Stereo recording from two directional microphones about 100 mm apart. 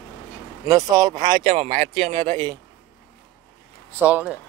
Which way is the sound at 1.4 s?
85° right.